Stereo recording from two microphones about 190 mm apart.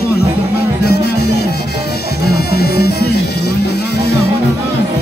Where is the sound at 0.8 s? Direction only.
55° left (ahead or behind).